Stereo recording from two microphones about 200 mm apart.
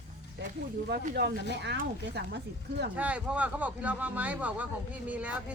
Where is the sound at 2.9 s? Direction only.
5° right (ahead or behind).